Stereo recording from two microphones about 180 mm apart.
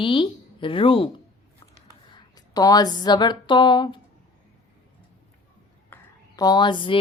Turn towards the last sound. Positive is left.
turn(degrees=25)  # may be behind; listen again after turning